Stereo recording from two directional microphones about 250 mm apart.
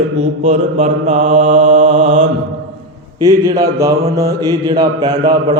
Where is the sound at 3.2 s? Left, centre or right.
Centre.